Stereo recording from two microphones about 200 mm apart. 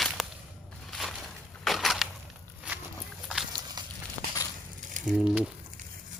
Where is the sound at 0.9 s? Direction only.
Centre (ahead or behind).